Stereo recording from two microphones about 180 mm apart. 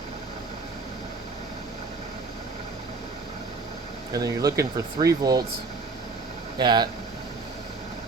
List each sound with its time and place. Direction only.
4.1 s speech: 20° right (ahead or behind)
6.6 s speech: 25° right (ahead or behind)